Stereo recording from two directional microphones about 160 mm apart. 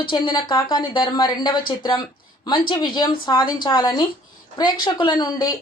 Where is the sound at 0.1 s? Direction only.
30° left (ahead or behind).